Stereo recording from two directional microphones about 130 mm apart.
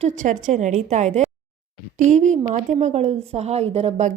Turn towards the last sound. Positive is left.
turn(degrees=-55)  # may be behind; listen again after turning